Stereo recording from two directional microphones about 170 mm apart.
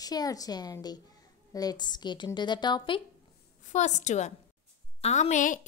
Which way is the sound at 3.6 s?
45° left (ahead or behind).